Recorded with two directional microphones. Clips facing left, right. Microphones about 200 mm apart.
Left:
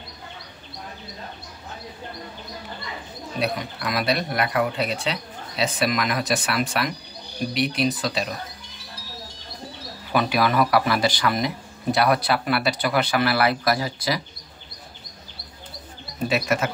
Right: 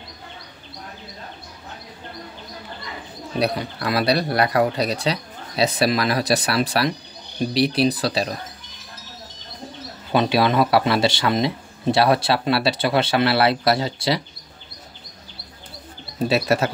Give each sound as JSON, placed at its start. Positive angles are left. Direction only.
{"t": 3.3, "sound": "speech", "side_deg": -35}
{"t": 10.1, "sound": "speech", "side_deg": -25}
{"t": 16.3, "sound": "speech", "side_deg": -35}